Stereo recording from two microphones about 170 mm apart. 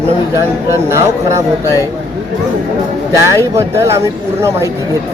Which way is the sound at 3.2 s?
15° right (ahead or behind).